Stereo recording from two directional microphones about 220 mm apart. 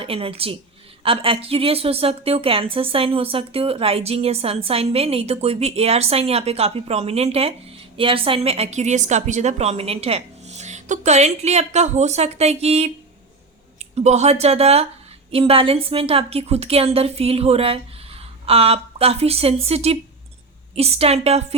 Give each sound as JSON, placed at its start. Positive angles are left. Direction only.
{"t": 0.0, "sound": "a woman's voice", "side_deg": -25}